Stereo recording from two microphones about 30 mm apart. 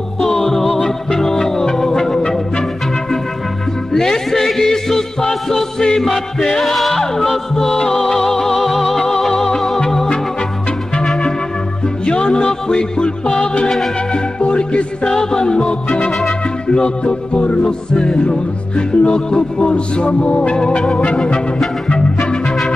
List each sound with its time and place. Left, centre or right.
0.2 s music: centre
2.1 s music: left
3.9 s music: centre
9.0 s music: centre
12.1 s music: left
15.0 s music: left
16.1 s music: centre
16.6 s music: left
17.6 s music: left